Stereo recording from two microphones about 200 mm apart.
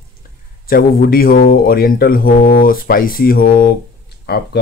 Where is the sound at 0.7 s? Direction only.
45° left (ahead or behind).